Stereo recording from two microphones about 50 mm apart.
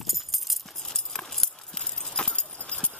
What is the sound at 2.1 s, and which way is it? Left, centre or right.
Clip-clop, centre.